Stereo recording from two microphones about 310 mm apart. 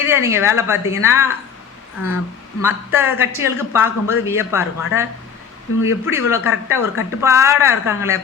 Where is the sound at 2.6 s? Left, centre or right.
Centre.